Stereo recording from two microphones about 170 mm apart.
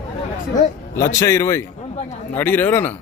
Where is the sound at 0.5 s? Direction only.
15° left (ahead or behind).